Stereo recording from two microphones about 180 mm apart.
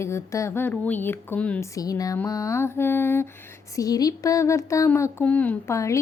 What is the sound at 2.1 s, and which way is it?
Speech, 15° left (ahead or behind).